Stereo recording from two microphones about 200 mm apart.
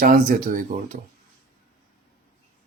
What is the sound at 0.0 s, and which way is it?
Speech, 40° right (ahead or behind).